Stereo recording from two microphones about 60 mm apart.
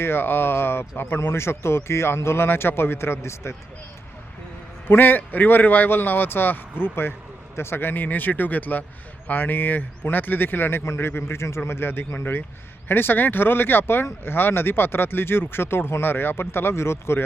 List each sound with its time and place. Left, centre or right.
0.0 s a man's voice: left
4.9 s speech: left